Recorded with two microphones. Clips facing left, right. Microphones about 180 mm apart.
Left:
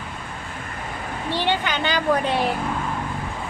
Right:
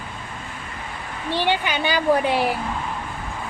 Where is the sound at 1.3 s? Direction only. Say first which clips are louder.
Right 1 dB; 15° right (ahead or behind).